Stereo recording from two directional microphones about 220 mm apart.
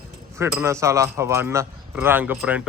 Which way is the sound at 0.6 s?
15° right (ahead or behind).